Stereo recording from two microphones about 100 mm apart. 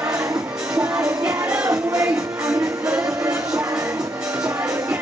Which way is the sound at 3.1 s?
30° right (ahead or behind).